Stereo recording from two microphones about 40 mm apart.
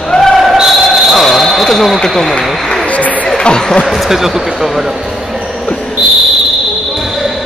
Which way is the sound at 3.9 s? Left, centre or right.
Centre.